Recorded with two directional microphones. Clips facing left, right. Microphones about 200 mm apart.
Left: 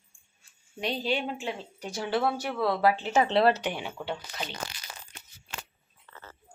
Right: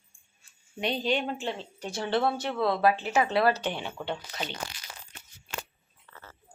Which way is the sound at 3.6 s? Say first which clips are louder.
Even; 10° left (ahead or behind).